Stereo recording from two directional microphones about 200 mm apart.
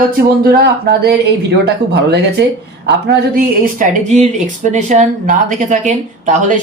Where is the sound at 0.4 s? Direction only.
50° right (ahead or behind).